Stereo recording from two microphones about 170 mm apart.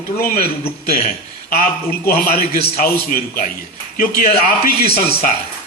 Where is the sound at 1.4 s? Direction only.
60° left (ahead or behind).